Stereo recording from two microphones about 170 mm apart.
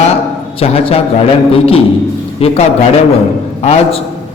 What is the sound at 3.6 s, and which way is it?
Speech, 40° left (ahead or behind).